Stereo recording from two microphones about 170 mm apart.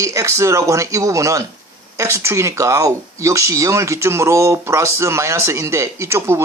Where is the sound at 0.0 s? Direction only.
20° right (ahead or behind).